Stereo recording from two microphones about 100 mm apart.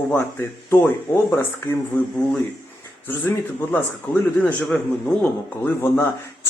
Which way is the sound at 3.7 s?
15° left (ahead or behind).